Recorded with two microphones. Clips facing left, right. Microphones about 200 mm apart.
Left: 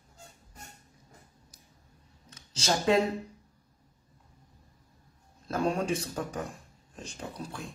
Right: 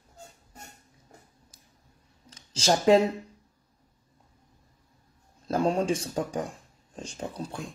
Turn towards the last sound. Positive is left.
turn(degrees=-30)  # may be behind; listen again after turning